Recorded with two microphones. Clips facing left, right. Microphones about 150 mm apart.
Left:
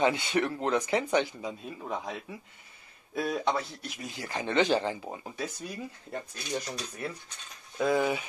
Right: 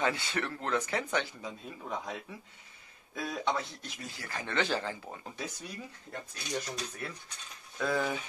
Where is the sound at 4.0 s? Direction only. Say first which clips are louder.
Left 6 dB; 20° left (ahead or behind).